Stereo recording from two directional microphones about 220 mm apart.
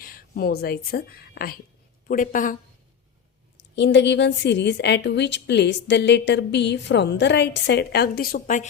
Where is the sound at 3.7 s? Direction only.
50° left (ahead or behind).